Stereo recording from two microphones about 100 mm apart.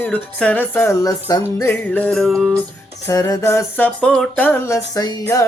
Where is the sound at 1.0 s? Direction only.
35° left (ahead or behind).